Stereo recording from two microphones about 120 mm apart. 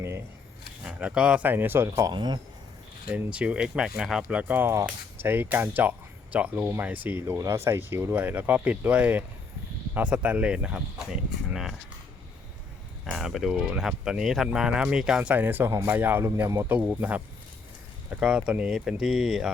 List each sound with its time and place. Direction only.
0.9 s speech: 10° right (ahead or behind); by 2.1 s 25° right (ahead or behind)
2.1 s speech: 40° right (ahead or behind)
3.1 s speech: 10° right (ahead or behind)
13.1 s speech: centre (ahead or behind)